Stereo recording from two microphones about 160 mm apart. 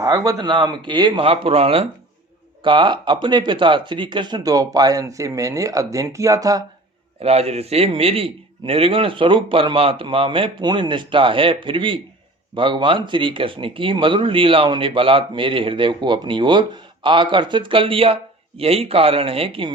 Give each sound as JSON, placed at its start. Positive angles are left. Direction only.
{"t": 0.0, "sound": "speech", "side_deg": -20}
{"t": 7.2, "sound": "speech", "side_deg": -40}